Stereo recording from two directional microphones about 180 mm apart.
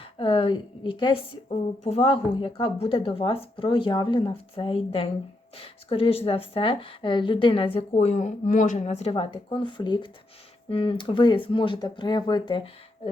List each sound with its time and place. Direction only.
0.0 s a woman's voice: 30° left (ahead or behind)